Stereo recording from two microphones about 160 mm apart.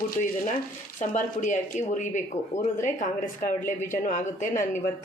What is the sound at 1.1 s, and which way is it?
Speech, 50° left (ahead or behind).